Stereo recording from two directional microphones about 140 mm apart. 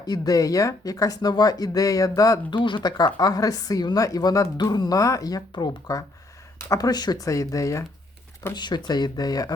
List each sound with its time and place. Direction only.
0.0 s speech: 25° left (ahead or behind)